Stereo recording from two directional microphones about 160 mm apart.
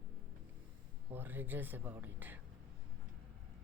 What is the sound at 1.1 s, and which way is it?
Speech, 10° right (ahead or behind).